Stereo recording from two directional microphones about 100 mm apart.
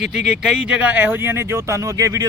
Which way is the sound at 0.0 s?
5° right (ahead or behind).